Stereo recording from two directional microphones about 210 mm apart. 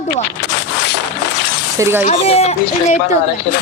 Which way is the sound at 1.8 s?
10° right (ahead or behind).